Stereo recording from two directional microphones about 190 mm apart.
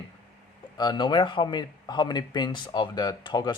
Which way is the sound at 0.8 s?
25° left (ahead or behind).